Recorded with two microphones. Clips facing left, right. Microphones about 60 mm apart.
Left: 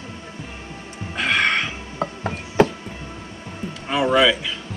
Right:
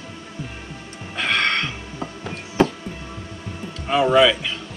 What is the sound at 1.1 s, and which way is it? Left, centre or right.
Music, centre.